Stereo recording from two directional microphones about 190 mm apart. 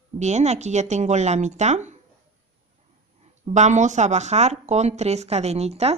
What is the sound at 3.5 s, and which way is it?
A woman's voice, 40° right (ahead or behind).